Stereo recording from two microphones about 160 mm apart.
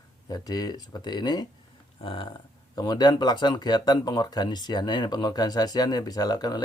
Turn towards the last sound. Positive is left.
turn(degrees=25)  # may be behind; listen again after turning